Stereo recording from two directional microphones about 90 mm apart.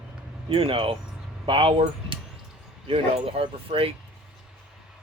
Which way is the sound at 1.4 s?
75° right (ahead or behind).